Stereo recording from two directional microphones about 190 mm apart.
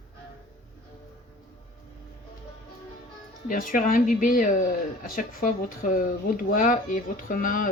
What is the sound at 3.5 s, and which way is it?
Speech, 45° left (ahead or behind).